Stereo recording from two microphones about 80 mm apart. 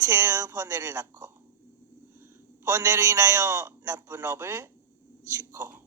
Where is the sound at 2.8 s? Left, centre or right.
Right.